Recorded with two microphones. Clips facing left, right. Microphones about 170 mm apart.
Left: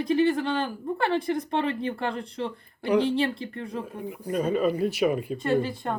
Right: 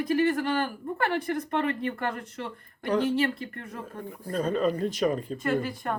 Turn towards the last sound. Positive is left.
turn(degrees=25)  # may be behind; listen again after turning